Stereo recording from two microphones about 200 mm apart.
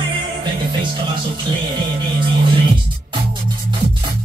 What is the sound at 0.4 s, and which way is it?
Music, 25° right (ahead or behind).